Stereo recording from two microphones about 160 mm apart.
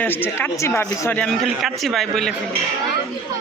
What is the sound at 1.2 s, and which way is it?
A man's voice, centre (ahead or behind).